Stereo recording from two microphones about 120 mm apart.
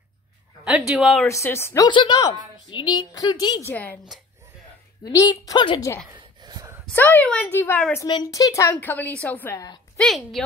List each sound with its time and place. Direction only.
0.7 s a woman's voice: 5° right (ahead or behind)
1.2 s a woman's voice: 20° left (ahead or behind)
1.9 s a woman's voice: 40° left (ahead or behind)
3.6 s a woman's voice: 15° left (ahead or behind)
5.3 s a woman's voice: 40° left (ahead or behind)
6.1 s a sound: 35° right (ahead or behind)
6.9 s a woman's voice: 15° left (ahead or behind)
8.1 s a woman's voice: 30° left (ahead or behind); by 9.6 s 15° left (ahead or behind)
9.9 s a woman's voice: centre (ahead or behind)